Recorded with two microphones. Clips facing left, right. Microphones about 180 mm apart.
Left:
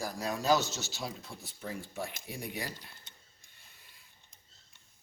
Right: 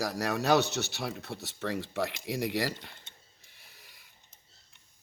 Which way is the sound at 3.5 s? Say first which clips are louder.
Right 4 dB; 90° right.